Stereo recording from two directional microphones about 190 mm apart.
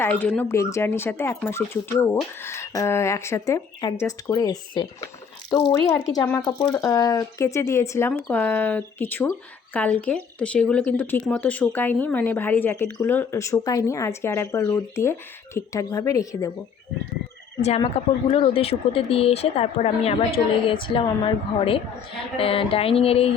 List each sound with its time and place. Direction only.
0.0 s a woman's voice: 10° left (ahead or behind)
17.6 s a woman's voice: 35° left (ahead or behind)